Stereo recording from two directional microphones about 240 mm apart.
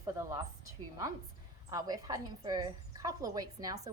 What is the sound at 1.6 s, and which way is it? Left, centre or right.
A woman's voice, centre.